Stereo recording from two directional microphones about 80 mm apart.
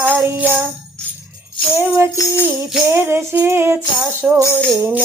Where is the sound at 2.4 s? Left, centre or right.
Right.